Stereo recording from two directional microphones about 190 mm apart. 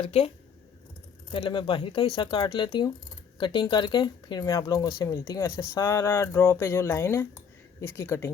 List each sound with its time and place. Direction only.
0.0 s speech: 30° left (ahead or behind)
1.3 s speech: 25° left (ahead or behind)